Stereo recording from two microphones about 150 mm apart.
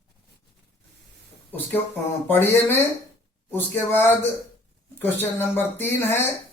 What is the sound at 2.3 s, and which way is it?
Speech, 15° left (ahead or behind).